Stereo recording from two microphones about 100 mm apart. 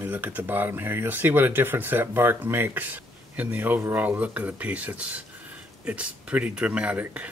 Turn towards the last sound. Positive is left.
turn(degrees=-15)  # may be behind; listen again after turning